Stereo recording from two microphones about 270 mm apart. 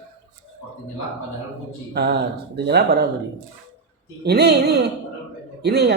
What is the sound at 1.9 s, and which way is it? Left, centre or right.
A woman's voice, right.